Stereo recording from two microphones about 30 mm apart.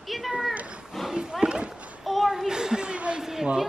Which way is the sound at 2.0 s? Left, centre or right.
Centre.